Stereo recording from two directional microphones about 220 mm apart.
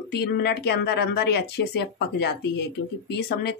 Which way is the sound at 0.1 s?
45° left (ahead or behind).